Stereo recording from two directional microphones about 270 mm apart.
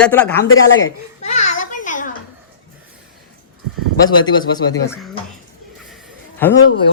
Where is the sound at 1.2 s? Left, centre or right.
Left.